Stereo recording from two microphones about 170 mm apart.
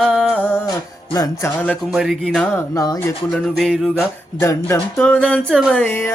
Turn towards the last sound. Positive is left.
turn(degrees=15)  # may be behind; listen again after turning